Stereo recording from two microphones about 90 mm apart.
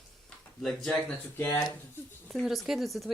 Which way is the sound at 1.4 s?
30° left (ahead or behind).